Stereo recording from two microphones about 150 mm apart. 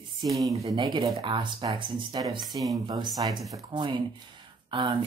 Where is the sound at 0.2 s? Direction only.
25° right (ahead or behind).